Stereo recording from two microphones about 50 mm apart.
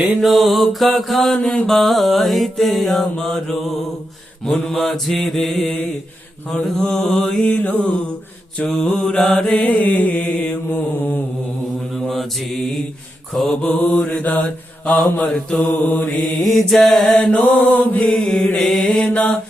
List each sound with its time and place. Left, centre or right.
0.0 s mantra: centre
7.4 s mantra: left
8.6 s mantra: centre
9.6 s mantra: left
10.8 s mantra: left
11.9 s mantra: centre
13.5 s mantra: centre
13.7 s mantra: left
15.2 s mantra: centre
15.6 s mantra: left
16.2 s mantra: centre
17.2 s mantra: left
18.5 s mantra: centre
18.9 s mantra: left